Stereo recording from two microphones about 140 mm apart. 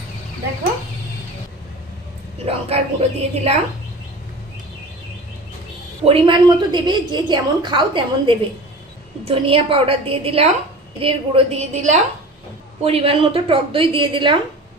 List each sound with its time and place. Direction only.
2.4 s a woman's voice: 45° right (ahead or behind)
6.0 s a woman's voice: 40° right (ahead or behind)
11.7 s a woman's voice: 55° right (ahead or behind)
12.8 s a woman's voice: 45° right (ahead or behind)